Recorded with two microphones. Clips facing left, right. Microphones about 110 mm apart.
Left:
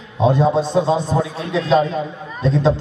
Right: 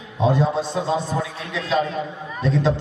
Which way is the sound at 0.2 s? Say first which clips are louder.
Left 4 dB; 20° left (ahead or behind).